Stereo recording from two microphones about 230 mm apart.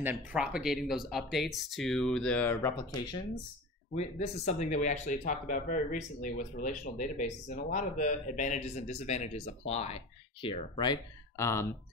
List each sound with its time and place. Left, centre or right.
0.0 s speech: centre
3.9 s speech: left; by 11.6 s centre